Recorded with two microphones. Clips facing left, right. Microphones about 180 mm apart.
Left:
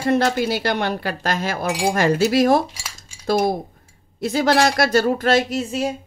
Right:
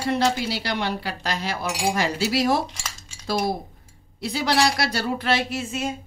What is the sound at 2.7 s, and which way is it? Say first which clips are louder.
Cutlery: right 1 dB; 5° left (ahead or behind).